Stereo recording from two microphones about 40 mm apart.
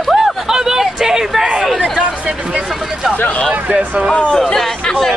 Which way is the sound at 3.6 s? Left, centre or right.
Right.